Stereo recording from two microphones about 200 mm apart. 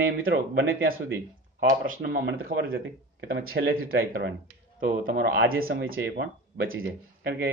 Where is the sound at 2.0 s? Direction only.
55° right (ahead or behind).